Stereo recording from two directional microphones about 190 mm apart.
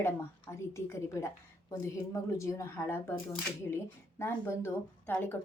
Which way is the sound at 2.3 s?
15° left (ahead or behind).